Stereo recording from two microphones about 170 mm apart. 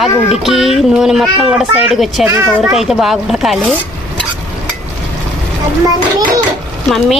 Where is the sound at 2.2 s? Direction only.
15° right (ahead or behind).